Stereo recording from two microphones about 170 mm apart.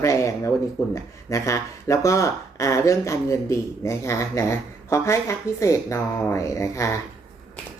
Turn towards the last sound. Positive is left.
turn(degrees=15)  # may be behind; listen again after turning